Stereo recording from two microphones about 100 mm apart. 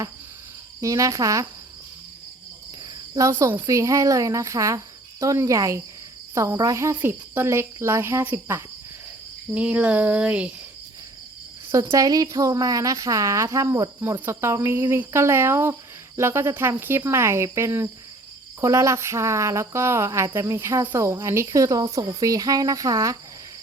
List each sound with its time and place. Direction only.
0.8 s speech: 35° right (ahead or behind)
2.8 s cricket: 35° right (ahead or behind)
3.7 s speech: 30° right (ahead or behind)
9.6 s a sound: 15° right (ahead or behind)
11.7 s speech: 30° right (ahead or behind)